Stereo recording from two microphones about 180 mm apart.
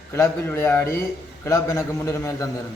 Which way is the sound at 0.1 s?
15° left (ahead or behind).